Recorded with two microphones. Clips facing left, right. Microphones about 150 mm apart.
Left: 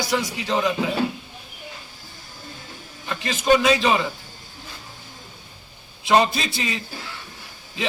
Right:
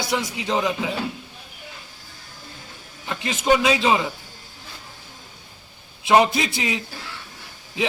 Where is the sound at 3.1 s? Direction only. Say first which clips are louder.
Left 1 dB; 20° right (ahead or behind).